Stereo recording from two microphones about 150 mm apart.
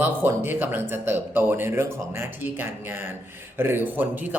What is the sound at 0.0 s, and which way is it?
Speech, 15° right (ahead or behind).